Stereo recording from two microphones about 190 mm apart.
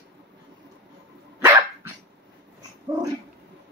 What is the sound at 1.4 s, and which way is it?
Dog, 15° right (ahead or behind).